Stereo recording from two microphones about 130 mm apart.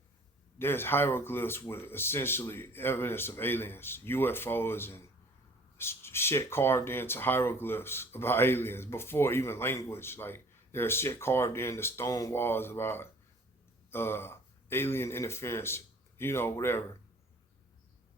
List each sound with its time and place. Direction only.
0.6 s speech: 15° left (ahead or behind)